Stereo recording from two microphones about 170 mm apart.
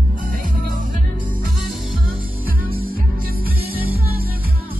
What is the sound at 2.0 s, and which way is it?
Music, 60° right (ahead or behind).